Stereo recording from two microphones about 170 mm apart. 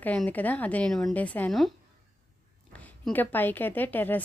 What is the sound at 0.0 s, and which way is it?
A woman's voice, 10° left (ahead or behind).